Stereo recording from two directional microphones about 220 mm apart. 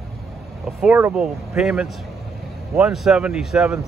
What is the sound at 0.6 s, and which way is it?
Speech, 5° right (ahead or behind).